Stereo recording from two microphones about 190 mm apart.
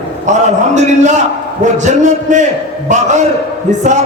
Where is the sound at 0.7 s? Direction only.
40° right (ahead or behind).